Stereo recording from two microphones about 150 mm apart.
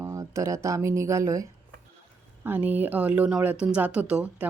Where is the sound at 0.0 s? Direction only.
20° right (ahead or behind).